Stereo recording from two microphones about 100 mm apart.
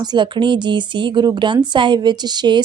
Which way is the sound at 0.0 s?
50° right (ahead or behind).